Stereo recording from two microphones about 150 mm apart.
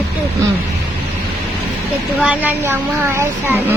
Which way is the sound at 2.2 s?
10° right (ahead or behind).